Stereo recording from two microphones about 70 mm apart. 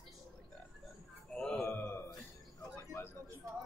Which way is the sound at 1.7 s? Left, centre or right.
Left.